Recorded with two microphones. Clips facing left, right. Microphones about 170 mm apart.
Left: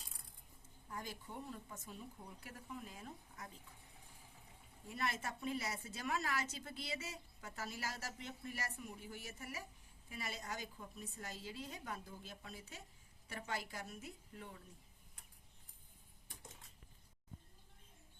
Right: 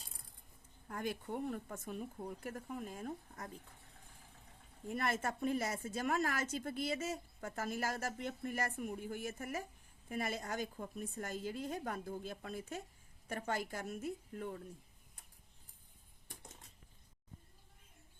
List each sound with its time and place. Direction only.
0.9 s a woman's voice: 60° right (ahead or behind)
4.9 s a woman's voice: 50° right (ahead or behind)